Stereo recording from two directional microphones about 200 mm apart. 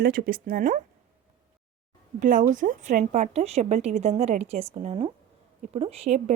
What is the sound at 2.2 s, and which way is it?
A woman's voice, 40° right (ahead or behind).